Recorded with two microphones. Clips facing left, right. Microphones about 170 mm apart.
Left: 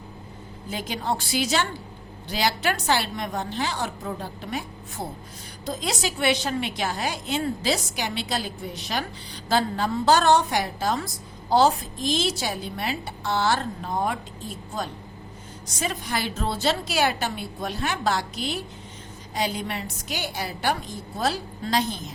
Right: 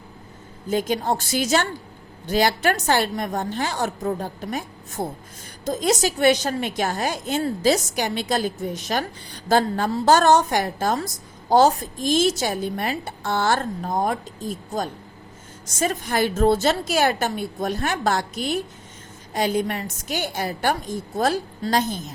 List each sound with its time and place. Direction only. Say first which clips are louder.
0.7 s a woman's voice: right 6 dB; 45° right (ahead or behind)